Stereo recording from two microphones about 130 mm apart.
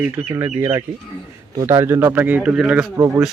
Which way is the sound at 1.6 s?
20° right (ahead or behind).